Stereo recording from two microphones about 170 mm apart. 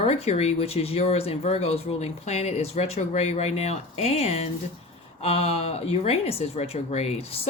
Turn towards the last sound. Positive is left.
turn(degrees=35)  # may be behind; listen again after turning